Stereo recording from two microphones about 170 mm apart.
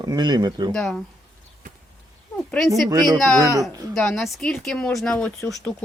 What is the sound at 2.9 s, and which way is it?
Speech, 20° right (ahead or behind).